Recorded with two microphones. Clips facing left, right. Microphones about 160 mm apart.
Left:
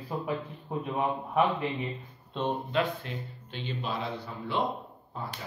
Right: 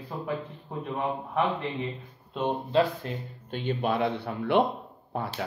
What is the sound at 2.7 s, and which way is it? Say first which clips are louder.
Speech: right 5 dB; 40° right (ahead or behind).